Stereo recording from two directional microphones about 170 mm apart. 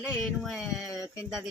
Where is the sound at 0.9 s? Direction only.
20° left (ahead or behind).